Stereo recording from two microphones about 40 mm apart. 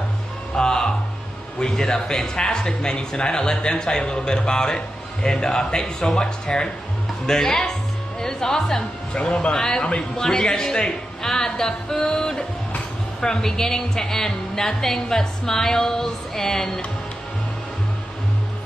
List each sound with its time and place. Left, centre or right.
0.6 s music: centre
1.6 s a woman's voice: centre
9.1 s speech: left
9.5 s a woman's voice: centre